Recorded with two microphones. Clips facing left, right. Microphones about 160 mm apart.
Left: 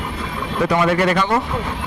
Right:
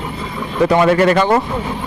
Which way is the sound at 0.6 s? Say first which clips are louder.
Right 5 dB; 35° right (ahead or behind).